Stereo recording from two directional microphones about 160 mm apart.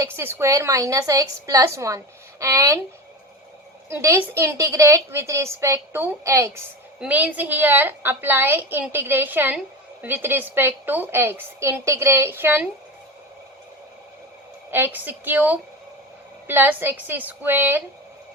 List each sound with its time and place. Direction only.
0.0 s a woman's voice: 15° right (ahead or behind)
3.8 s a woman's voice: 20° right (ahead or behind)
14.7 s a woman's voice: 15° right (ahead or behind)